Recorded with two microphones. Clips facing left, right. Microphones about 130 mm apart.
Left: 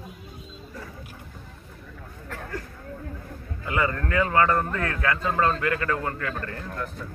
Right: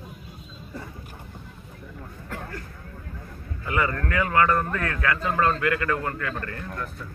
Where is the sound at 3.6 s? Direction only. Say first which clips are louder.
Even; 25° left (ahead or behind).